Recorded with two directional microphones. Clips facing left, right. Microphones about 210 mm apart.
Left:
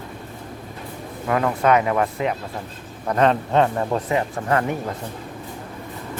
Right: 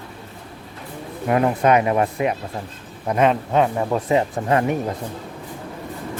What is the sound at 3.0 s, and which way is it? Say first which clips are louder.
Speech: even; 10° right (ahead or behind).